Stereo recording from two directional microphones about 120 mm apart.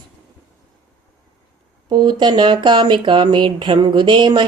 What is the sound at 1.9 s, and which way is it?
Speech, 40° right (ahead or behind).